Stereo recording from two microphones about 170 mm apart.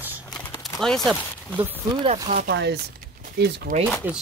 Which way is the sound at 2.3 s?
65° right (ahead or behind).